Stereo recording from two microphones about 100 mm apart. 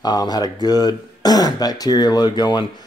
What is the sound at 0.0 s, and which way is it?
Speech, 45° left (ahead or behind).